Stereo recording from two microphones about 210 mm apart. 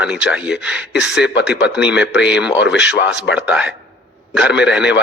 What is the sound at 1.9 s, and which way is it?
Speech, 55° left (ahead or behind).